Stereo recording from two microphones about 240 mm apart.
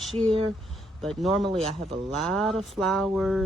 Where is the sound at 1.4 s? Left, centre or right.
Right.